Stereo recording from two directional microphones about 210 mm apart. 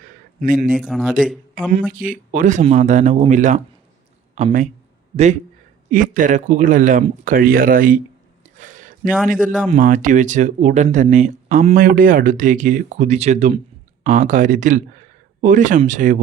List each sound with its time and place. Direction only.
0.8 s speech: centre (ahead or behind)
2.0 s speech: 40° right (ahead or behind)
8.5 s a sound: 35° right (ahead or behind)
9.6 s speech: 35° right (ahead or behind)